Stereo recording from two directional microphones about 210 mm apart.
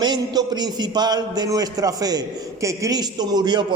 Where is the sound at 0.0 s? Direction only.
20° right (ahead or behind).